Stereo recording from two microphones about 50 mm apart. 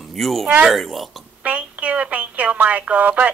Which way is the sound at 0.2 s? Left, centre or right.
Centre.